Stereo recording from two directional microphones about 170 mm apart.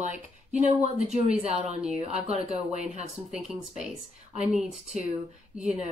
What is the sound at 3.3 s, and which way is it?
Speech, 5° right (ahead or behind).